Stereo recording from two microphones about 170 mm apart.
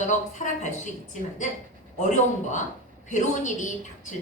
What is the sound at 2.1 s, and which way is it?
A woman's voice, 45° left (ahead or behind).